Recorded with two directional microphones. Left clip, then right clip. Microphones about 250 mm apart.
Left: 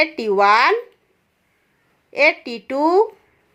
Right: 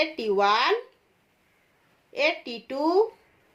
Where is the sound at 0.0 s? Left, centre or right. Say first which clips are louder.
Left 7 dB; left.